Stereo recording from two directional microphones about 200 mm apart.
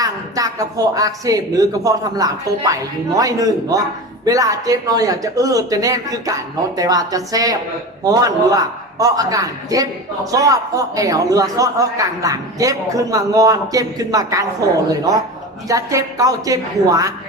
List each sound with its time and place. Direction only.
0.0 s a man's voice: 15° right (ahead or behind)